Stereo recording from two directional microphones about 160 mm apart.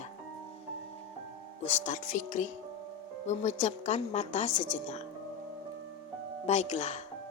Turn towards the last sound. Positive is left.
turn(degrees=45)  # may be behind; listen again after turning